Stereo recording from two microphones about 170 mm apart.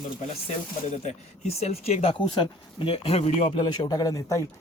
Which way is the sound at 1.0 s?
40° left (ahead or behind).